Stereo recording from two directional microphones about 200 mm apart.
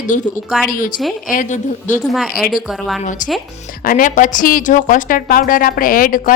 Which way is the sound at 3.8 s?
45° left (ahead or behind).